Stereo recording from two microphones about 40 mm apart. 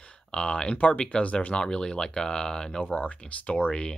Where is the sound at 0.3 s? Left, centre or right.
Left.